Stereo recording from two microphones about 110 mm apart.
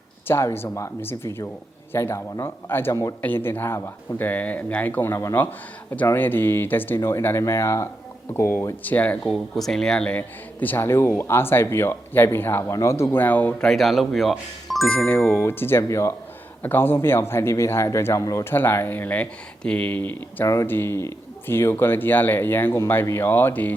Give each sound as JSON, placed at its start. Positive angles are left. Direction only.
{"t": 0.3, "sound": "speech", "side_deg": 20}
{"t": 3.2, "sound": "speech", "side_deg": 20}
{"t": 9.2, "sound": "speech", "side_deg": 0}
{"t": 14.9, "sound": "speech", "side_deg": 15}